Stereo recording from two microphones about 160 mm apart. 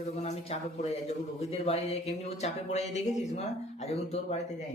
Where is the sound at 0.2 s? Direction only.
45° left (ahead or behind).